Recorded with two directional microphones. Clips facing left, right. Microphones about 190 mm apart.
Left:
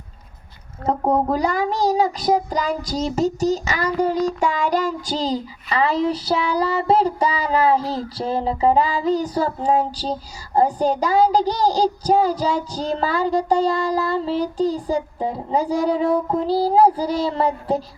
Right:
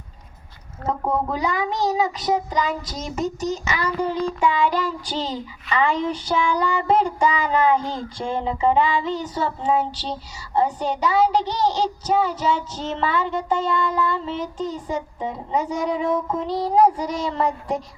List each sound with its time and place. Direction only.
0.9 s child singing: 40° left (ahead or behind)